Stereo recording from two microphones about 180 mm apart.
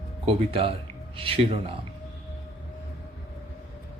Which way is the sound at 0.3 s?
30° right (ahead or behind).